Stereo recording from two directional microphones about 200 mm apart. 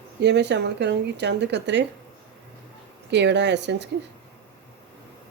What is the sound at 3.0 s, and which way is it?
Speech, 60° right (ahead or behind).